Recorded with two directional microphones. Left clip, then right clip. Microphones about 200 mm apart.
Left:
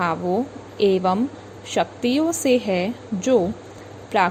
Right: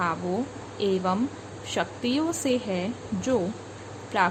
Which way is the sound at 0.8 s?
25° left (ahead or behind).